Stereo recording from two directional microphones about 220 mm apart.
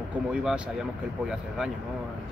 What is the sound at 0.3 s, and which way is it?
Speech, 5° right (ahead or behind).